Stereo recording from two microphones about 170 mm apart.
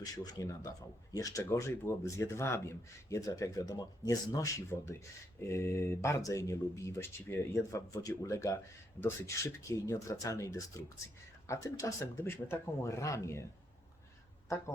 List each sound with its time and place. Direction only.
0.0 s speech: 20° left (ahead or behind)